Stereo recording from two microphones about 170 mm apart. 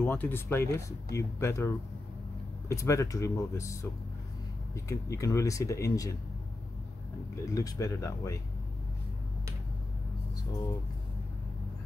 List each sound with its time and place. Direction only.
0.0 s speech: 10° left (ahead or behind)
7.4 s speech: 20° left (ahead or behind)